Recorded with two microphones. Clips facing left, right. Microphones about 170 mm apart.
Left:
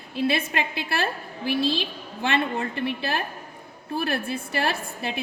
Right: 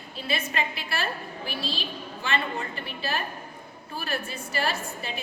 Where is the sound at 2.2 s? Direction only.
60° left (ahead or behind).